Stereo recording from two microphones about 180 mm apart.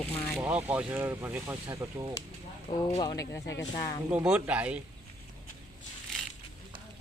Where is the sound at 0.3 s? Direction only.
5° right (ahead or behind).